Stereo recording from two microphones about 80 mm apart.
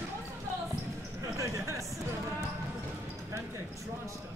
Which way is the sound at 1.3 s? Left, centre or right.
Right.